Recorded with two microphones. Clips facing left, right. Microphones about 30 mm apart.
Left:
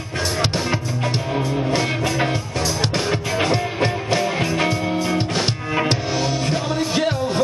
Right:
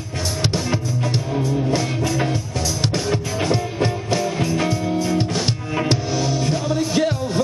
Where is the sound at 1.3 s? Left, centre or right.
Left.